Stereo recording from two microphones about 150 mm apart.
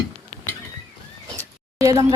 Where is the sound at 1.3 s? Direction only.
20° right (ahead or behind).